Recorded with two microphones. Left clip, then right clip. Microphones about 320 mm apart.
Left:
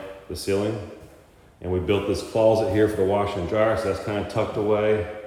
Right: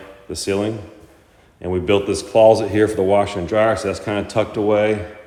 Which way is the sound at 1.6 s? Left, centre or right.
Right.